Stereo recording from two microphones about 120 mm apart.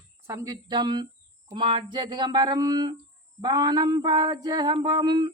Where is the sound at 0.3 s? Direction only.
30° right (ahead or behind).